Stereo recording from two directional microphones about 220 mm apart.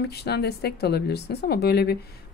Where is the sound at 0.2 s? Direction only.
50° left (ahead or behind).